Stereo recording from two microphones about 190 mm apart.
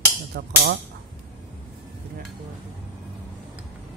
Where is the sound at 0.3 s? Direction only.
60° right (ahead or behind).